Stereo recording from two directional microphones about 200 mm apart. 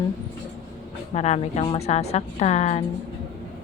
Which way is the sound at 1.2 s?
35° left (ahead or behind).